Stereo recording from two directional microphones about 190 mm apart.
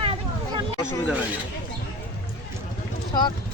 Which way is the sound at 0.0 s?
30° right (ahead or behind).